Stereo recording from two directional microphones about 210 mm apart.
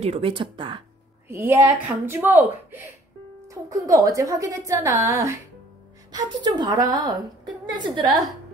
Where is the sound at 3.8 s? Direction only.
15° right (ahead or behind).